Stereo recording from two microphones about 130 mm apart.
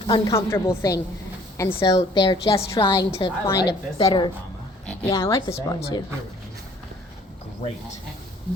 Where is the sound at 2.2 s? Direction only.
30° left (ahead or behind).